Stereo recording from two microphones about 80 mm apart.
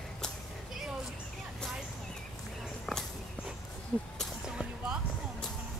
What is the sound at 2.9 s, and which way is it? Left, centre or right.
Walk, centre.